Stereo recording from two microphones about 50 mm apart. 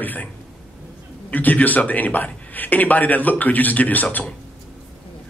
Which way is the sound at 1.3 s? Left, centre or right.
Left.